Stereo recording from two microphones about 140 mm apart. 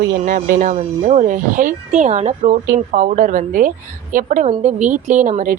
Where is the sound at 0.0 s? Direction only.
75° right (ahead or behind); by 2.6 s 55° right (ahead or behind).